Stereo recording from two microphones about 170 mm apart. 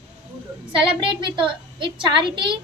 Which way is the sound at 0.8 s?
30° right (ahead or behind).